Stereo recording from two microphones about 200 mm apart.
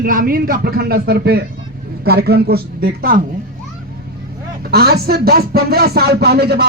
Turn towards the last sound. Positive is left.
turn(degrees=-55)  # may be behind; listen again after turning